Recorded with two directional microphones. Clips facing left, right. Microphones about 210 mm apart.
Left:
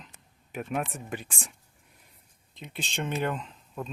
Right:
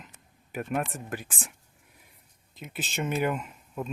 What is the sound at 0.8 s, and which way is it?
Speech, centre (ahead or behind).